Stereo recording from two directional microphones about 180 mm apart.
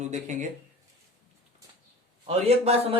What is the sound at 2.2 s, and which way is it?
Speech, 35° right (ahead or behind).